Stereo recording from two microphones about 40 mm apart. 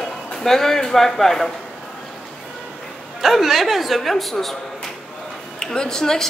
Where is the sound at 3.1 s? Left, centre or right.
Centre.